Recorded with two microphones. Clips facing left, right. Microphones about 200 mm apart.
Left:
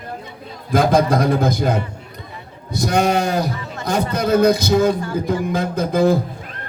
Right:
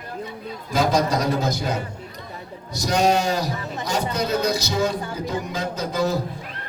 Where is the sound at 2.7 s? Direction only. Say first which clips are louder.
Left 2 dB; 55° left (ahead or behind).